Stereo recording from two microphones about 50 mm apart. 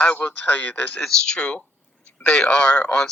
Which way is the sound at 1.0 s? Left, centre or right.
Centre.